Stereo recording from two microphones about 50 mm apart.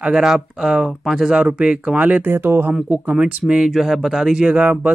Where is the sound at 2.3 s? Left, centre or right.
Right.